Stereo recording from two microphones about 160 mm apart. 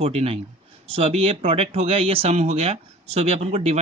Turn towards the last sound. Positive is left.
turn(degrees=-40)  # may be behind; listen again after turning